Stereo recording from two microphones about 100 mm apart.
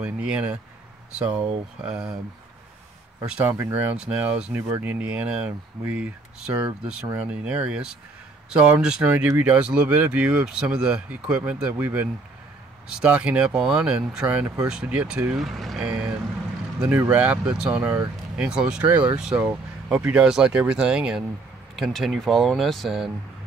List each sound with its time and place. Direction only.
0.0 s speech: 10° right (ahead or behind)
3.3 s speech: 10° right (ahead or behind)
3.9 s speech: 10° right (ahead or behind)
4.6 s speech: 25° right (ahead or behind)
4.8 s speech: 15° right (ahead or behind)
17.1 s speech: 15° right (ahead or behind)
18.9 s speech: 20° right (ahead or behind); by 23.0 s centre (ahead or behind)